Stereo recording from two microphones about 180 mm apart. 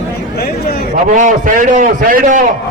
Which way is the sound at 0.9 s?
45° right (ahead or behind).